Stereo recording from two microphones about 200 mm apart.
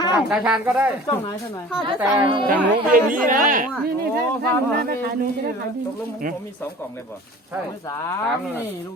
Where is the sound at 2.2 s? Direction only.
25° right (ahead or behind).